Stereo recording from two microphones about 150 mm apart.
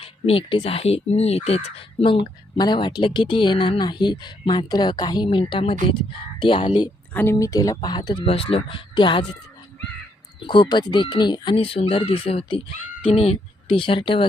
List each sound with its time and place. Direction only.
0.0 s speech: 40° left (ahead or behind)
7.1 s speech: 10° left (ahead or behind)
7.3 s speech: 20° left (ahead or behind)
10.4 s speech: 30° left (ahead or behind)